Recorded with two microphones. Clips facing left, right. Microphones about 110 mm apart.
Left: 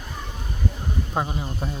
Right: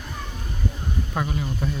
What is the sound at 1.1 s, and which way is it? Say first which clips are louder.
Speech: even; 25° left (ahead or behind).